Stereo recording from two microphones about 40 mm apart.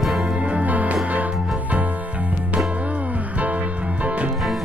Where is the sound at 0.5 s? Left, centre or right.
Right.